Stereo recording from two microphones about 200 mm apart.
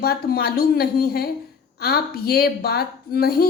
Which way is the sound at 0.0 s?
50° left (ahead or behind).